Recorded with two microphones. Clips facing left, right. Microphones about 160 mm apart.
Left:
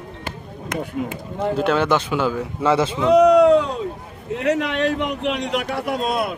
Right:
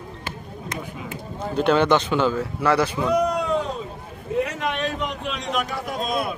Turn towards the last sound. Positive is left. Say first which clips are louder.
# left 3 dB
turn(degrees=70)  # may be behind; listen again after turning